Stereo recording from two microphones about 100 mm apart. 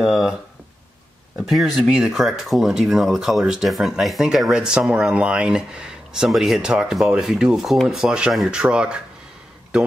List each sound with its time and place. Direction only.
0.0 s speech: 5° right (ahead or behind)
1.4 s speech: centre (ahead or behind)